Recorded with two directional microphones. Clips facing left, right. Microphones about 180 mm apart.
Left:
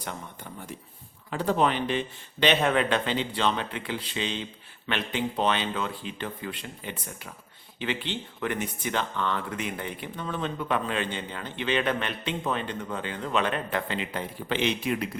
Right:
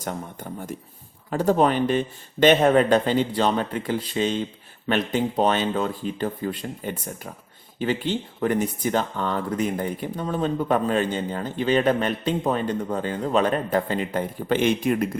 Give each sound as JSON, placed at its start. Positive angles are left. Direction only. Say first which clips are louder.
{"t": 0.0, "sound": "speech", "louder": "right 6 dB", "side_deg": -45}